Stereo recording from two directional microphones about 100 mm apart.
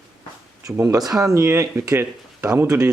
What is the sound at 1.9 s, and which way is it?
Speech, 15° right (ahead or behind).